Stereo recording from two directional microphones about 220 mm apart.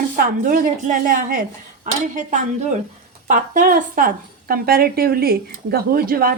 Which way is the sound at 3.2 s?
35° right (ahead or behind).